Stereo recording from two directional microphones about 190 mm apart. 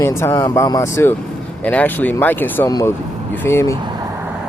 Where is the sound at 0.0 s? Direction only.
15° left (ahead or behind).